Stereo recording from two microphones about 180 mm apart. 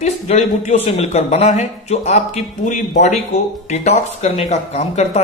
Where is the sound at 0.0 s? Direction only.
40° left (ahead or behind).